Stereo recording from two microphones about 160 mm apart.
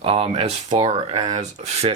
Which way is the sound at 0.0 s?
35° right (ahead or behind).